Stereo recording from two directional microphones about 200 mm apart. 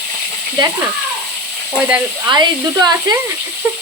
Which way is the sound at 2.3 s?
20° right (ahead or behind).